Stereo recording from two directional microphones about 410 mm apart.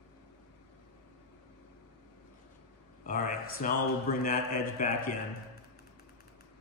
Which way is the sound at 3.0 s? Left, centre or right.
Centre.